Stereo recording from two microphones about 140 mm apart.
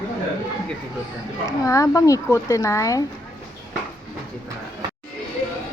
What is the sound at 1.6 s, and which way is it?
Speech, 25° left (ahead or behind).